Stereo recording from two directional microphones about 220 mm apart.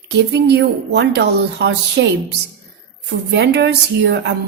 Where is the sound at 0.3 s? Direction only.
50° right (ahead or behind).